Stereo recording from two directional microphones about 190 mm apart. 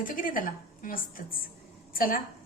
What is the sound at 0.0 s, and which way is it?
A woman's voice, 45° left (ahead or behind).